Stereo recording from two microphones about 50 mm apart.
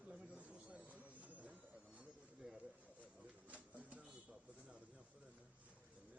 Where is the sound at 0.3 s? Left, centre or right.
Right.